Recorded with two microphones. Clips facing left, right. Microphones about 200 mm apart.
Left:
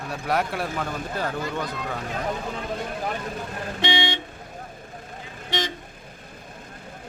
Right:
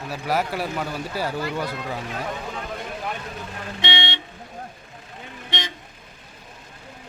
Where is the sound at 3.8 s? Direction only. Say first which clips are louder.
Left 4 dB; 50° left (ahead or behind).